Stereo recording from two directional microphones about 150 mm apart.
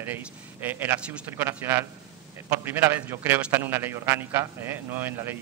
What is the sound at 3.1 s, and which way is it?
Speech, 15° right (ahead or behind).